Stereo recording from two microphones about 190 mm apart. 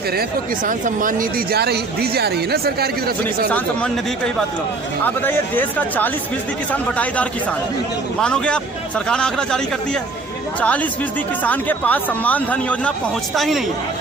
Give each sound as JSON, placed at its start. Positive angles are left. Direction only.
{"t": 0.2, "sound": "speech", "side_deg": -45}
{"t": 5.0, "sound": "speech", "side_deg": 10}
{"t": 8.2, "sound": "speech", "side_deg": 5}
{"t": 11.4, "sound": "speech", "side_deg": 10}